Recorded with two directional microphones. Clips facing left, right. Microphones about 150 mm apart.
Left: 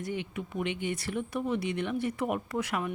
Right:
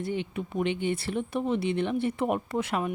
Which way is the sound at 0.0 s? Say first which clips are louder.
Right 4 dB; 30° right (ahead or behind).